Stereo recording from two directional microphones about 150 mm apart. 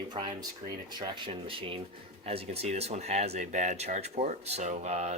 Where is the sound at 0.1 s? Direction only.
30° right (ahead or behind).